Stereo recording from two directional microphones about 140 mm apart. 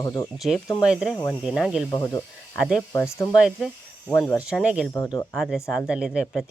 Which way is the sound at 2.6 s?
Centre (ahead or behind).